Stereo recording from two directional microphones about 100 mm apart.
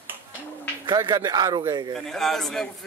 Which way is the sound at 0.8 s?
45° right (ahead or behind).